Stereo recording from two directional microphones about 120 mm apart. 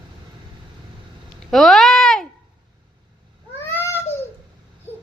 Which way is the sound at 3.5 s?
20° left (ahead or behind).